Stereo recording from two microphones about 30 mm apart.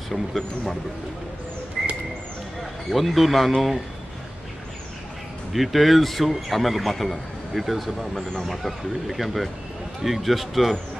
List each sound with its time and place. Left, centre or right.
1.8 s bird: centre
2.9 s a man's voice: centre
5.5 s a man's voice: centre
8.0 s speech: centre
8.5 s a man's voice: centre